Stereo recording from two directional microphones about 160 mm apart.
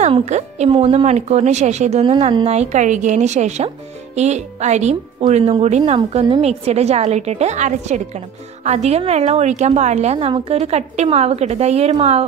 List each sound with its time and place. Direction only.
0.0 s a woman's voice: 45° right (ahead or behind)